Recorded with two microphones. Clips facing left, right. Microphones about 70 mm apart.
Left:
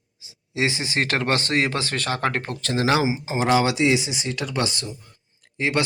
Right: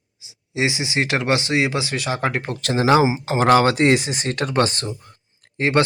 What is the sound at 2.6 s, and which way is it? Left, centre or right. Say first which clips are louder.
Speech: right 6 dB; right.